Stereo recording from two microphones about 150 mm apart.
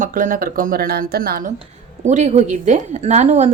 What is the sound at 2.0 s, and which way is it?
A woman's voice, 50° right (ahead or behind).